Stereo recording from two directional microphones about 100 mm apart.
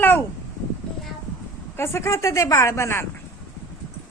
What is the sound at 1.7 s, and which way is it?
Speech, 25° left (ahead or behind).